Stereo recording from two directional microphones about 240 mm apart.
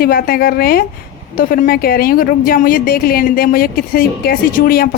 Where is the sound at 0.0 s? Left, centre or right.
Left.